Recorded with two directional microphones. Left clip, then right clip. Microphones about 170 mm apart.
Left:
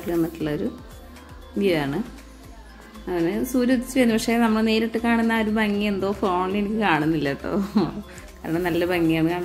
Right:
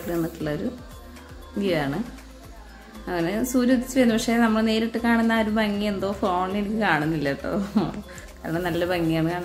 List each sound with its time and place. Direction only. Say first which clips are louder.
0.1 s a woman's voice: left 3 dB; 15° left (ahead or behind)
1.6 s a woman's voice: left 2 dB; 15° left (ahead or behind)
3.1 s a woman's voice: left 1 dB; 10° left (ahead or behind)